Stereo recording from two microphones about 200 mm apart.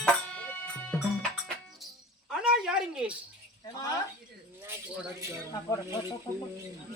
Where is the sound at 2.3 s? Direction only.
5° right (ahead or behind).